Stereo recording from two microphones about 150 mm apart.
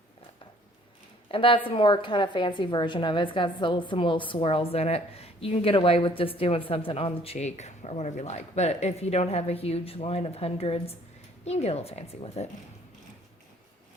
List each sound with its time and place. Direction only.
1.3 s a woman's voice: 35° left (ahead or behind)